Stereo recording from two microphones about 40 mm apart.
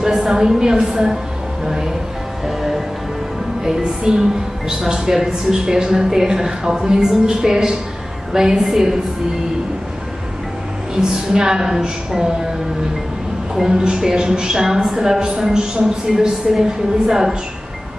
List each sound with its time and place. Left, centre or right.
0.0 s a woman's voice: centre
2.4 s music: centre
3.6 s a woman's voice: centre
11.0 s a woman's voice: centre
13.6 s a woman's voice: centre